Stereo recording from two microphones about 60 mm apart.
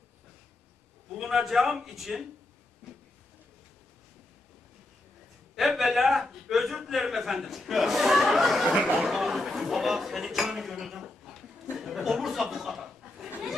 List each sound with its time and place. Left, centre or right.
1.1 s a man's voice: centre
5.6 s a man's voice: centre
8.7 s speech: centre
9.1 s speech: centre
11.7 s a sound: centre